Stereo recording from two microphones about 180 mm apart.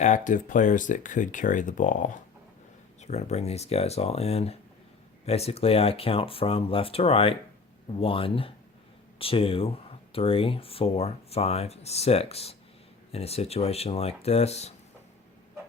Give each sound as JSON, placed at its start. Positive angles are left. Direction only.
{"t": 0.0, "sound": "speech", "side_deg": 45}